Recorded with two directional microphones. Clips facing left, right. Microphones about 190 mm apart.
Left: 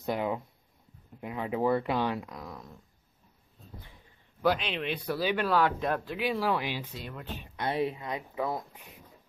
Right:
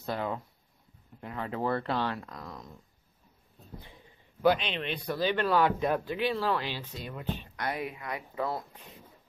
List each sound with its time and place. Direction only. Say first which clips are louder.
0.0 s speech: left 3 dB; 15° left (ahead or behind)
4.4 s speech: right 2 dB; centre (ahead or behind)
6.1 s speech: even; 10° left (ahead or behind)
7.1 s speech: right 4 dB; 5° right (ahead or behind)
7.5 s speech: left 8 dB; 25° left (ahead or behind)
8.4 s speech: even; 15° left (ahead or behind)